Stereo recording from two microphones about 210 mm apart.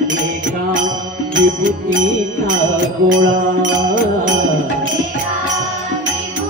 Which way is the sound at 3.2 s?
40° right (ahead or behind).